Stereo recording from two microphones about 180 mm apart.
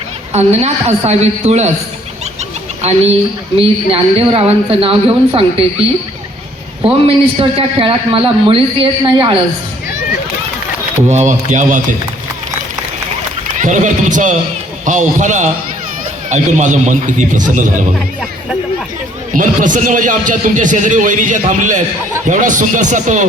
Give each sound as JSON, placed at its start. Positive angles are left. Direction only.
{"t": 0.3, "sound": "a woman's voice", "side_deg": -35}
{"t": 2.8, "sound": "a woman's voice", "side_deg": -35}
{"t": 6.8, "sound": "a woman's voice", "side_deg": -35}
{"t": 11.1, "sound": "a man's voice", "side_deg": -40}
{"t": 13.6, "sound": "a man's voice", "side_deg": -45}
{"t": 19.4, "sound": "a man's voice", "side_deg": -45}